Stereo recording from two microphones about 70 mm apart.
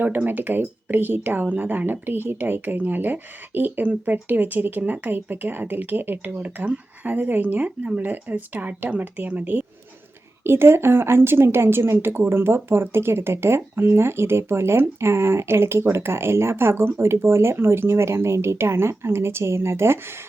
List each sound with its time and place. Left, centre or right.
0.3 s speech: right
10.4 s speech: right